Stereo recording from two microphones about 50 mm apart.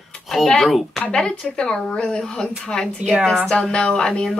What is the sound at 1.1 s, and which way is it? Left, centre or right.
Speech, centre.